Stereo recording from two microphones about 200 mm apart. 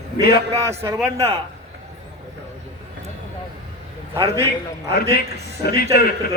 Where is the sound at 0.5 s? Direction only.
15° right (ahead or behind).